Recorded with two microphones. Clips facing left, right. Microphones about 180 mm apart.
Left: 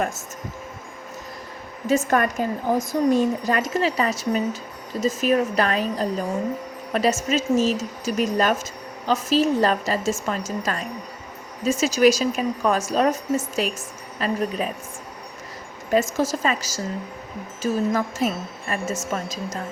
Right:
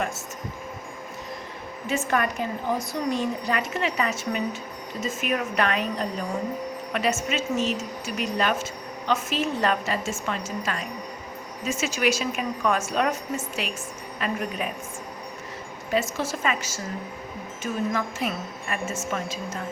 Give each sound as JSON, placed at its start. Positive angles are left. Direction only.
{"t": 1.9, "sound": "a woman's voice", "side_deg": 45}
{"t": 15.9, "sound": "a woman's voice", "side_deg": 45}